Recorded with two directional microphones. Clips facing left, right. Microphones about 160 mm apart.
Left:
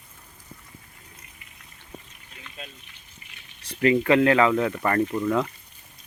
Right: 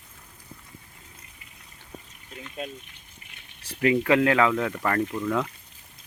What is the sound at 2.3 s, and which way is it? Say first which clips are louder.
Water: right 8 dB; 40° right (ahead or behind).